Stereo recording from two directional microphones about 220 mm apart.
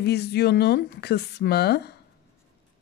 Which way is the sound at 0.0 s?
45° left (ahead or behind).